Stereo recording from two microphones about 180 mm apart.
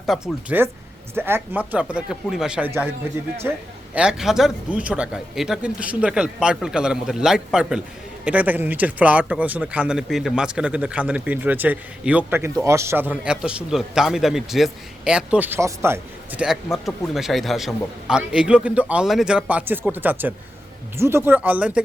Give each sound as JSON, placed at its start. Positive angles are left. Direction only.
{"t": 0.0, "sound": "speech", "side_deg": 0}